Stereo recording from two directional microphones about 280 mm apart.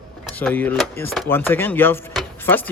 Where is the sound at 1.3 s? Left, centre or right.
Centre.